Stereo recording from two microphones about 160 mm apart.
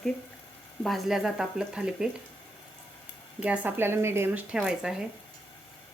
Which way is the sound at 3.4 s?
10° right (ahead or behind).